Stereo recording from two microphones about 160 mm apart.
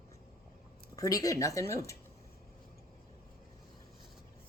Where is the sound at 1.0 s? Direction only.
20° left (ahead or behind).